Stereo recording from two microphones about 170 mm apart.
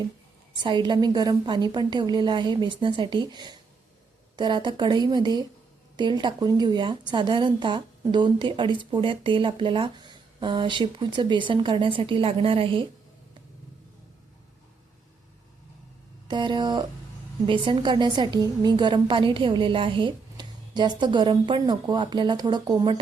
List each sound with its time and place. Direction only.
0.5 s a woman's voice: 25° right (ahead or behind)
16.3 s a woman's voice: 25° right (ahead or behind)